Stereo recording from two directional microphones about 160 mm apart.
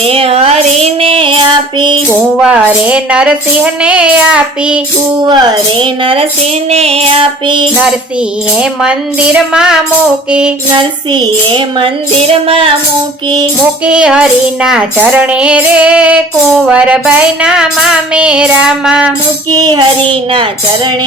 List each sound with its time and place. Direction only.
0.0 s child singing: 35° right (ahead or behind)
2.0 s speech: 10° right (ahead or behind)
5.3 s child singing: 30° right (ahead or behind)
8.5 s a woman's voice: 5° right (ahead or behind)
10.7 s child singing: 30° right (ahead or behind)
13.8 s speech: 5° right (ahead or behind)
19.5 s music: 25° right (ahead or behind)